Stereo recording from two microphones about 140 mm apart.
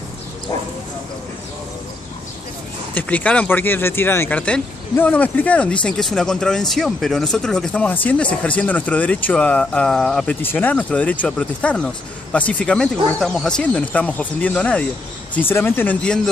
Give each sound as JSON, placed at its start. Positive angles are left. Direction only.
{"t": 2.9, "sound": "speech", "side_deg": 10}
{"t": 10.4, "sound": "speech", "side_deg": 15}